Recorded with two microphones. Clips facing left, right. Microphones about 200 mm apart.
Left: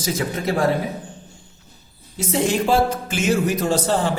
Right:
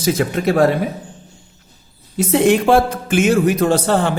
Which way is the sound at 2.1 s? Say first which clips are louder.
Right 7 dB; 60° right (ahead or behind).